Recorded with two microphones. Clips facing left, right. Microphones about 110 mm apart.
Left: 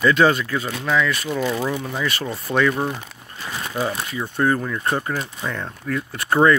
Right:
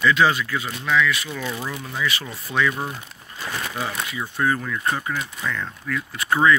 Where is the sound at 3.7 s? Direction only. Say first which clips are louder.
Left 8 dB; 35° left (ahead or behind).